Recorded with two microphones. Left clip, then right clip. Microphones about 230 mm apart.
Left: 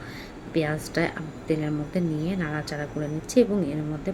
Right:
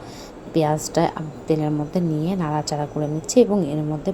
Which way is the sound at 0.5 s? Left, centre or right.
Centre.